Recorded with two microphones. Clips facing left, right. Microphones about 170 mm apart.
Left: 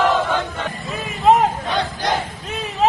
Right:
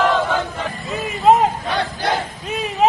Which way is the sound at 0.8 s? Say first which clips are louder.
Right 2 dB; centre (ahead or behind).